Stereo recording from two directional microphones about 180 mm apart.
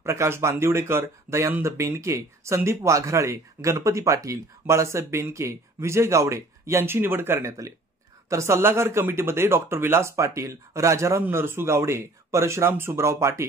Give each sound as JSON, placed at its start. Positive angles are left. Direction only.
{"t": 0.0, "sound": "speech", "side_deg": -15}